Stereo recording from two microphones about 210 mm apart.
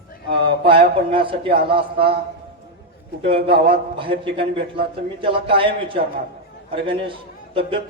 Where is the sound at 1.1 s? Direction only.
25° right (ahead or behind).